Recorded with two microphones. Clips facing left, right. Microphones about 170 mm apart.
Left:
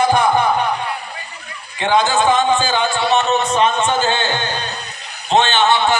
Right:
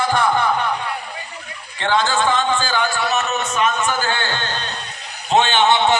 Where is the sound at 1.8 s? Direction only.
15° left (ahead or behind).